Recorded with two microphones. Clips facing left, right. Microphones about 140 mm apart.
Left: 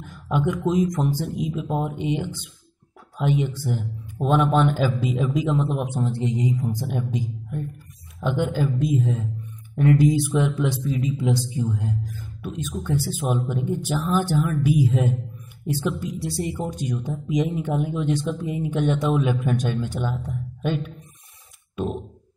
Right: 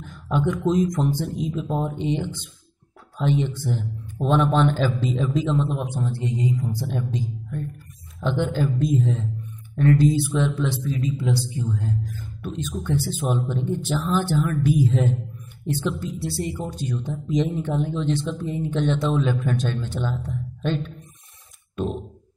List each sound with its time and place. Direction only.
0.0 s speech: 5° left (ahead or behind)
9.8 s speech: 15° left (ahead or behind)
21.7 s a sound: 5° left (ahead or behind)